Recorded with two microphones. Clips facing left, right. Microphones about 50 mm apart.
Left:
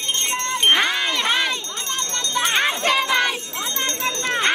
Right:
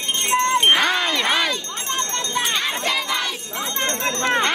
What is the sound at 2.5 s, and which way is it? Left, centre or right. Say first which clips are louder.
Crowd: left 4 dB; left.